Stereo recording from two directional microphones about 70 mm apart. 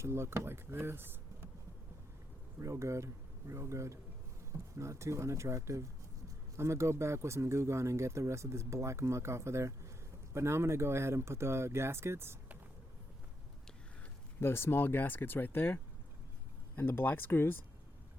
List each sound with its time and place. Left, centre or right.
0.0 s speech: right
2.6 s speech: right
14.4 s speech: left